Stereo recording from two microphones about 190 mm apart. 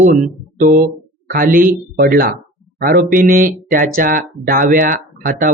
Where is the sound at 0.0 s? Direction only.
45° right (ahead or behind).